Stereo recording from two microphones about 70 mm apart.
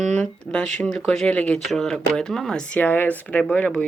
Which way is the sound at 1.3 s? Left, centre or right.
Centre.